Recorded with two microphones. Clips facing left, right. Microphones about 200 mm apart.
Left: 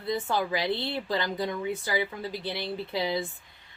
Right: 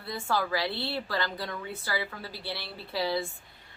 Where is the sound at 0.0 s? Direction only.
20° left (ahead or behind).